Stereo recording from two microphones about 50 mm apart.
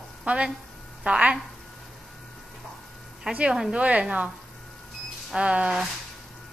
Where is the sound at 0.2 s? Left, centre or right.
Right.